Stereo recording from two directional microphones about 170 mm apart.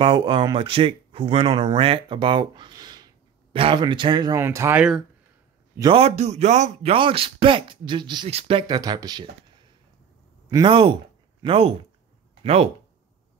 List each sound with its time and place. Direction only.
0.0 s speech: 30° right (ahead or behind); by 4.8 s 15° right (ahead or behind)
5.8 s speech: 30° right (ahead or behind)
10.5 s speech: 30° right (ahead or behind)